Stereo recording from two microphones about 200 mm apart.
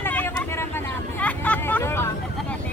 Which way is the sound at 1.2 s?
5° left (ahead or behind).